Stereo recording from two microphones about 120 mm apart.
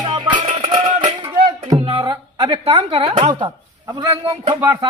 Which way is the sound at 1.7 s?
35° right (ahead or behind).